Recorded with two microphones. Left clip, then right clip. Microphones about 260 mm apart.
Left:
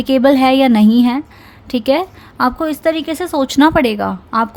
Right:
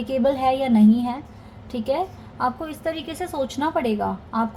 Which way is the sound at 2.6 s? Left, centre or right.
Left.